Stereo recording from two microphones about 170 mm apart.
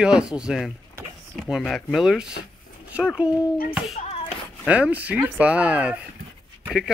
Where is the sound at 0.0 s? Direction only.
5° right (ahead or behind).